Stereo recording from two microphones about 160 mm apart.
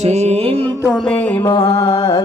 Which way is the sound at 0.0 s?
45° right (ahead or behind).